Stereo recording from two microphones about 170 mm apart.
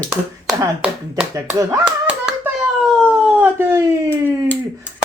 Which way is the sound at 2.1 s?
5° right (ahead or behind).